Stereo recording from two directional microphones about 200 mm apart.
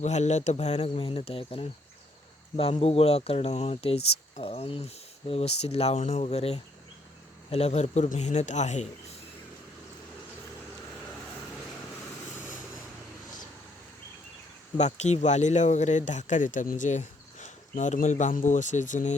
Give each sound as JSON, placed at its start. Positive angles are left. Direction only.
{"t": 0.0, "sound": "speech", "side_deg": 35}
{"t": 14.8, "sound": "speech", "side_deg": 35}